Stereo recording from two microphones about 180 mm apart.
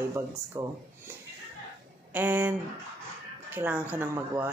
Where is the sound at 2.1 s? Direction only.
10° right (ahead or behind).